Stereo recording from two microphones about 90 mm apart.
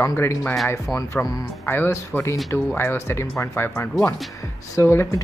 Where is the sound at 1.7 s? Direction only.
25° left (ahead or behind).